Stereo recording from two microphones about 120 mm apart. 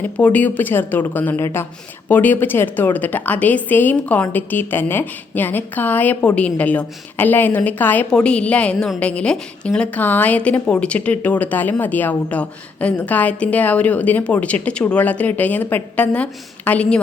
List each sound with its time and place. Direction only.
0.0 s a woman's voice: 15° left (ahead or behind)